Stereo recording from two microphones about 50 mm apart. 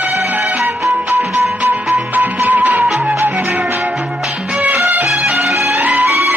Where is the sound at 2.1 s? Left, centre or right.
Right.